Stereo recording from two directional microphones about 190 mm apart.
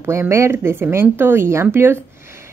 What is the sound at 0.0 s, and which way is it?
Speech, 15° right (ahead or behind).